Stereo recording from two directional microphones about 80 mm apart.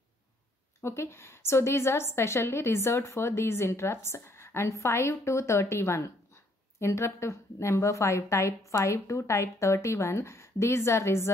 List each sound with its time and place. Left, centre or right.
0.7 s a woman's voice: left